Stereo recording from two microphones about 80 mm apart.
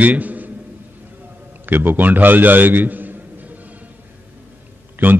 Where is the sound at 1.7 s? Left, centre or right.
Right.